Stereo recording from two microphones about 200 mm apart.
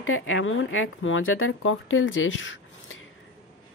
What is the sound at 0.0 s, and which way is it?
A woman's voice, 85° left.